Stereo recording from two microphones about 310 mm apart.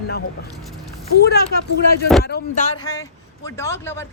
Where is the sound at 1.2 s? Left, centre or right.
Left.